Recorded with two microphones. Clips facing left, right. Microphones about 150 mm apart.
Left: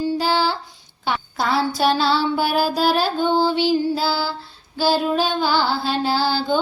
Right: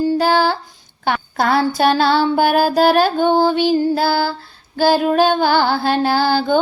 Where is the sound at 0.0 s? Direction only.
50° right (ahead or behind).